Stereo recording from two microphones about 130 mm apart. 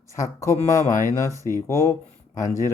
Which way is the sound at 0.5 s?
70° left (ahead or behind).